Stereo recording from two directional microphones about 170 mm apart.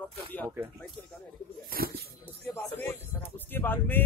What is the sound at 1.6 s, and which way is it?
Speech, 60° right (ahead or behind).